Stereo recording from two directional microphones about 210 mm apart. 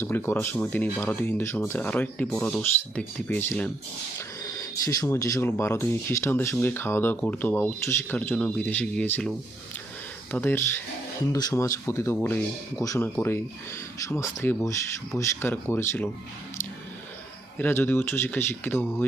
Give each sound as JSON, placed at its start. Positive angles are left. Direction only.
{"t": 0.0, "sound": "speech", "side_deg": 10}
{"t": 10.3, "sound": "speech", "side_deg": 10}
{"t": 17.6, "sound": "speech", "side_deg": 10}